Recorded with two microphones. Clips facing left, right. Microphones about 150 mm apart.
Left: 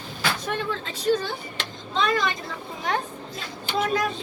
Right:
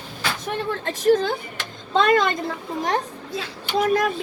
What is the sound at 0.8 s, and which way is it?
Speech, 55° right (ahead or behind).